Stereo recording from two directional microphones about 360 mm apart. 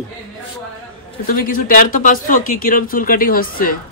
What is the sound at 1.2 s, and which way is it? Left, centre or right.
Speech, left.